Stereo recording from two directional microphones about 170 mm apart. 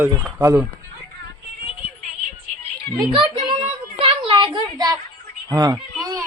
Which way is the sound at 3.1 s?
30° right (ahead or behind).